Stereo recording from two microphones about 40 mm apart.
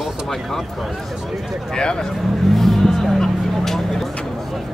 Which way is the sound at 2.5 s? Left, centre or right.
Centre.